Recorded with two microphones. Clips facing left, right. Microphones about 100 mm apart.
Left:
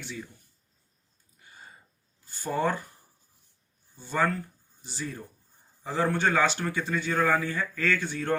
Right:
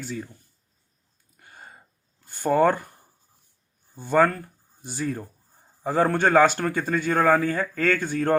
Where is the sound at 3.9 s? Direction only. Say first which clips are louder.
Right 7 dB; 50° right (ahead or behind).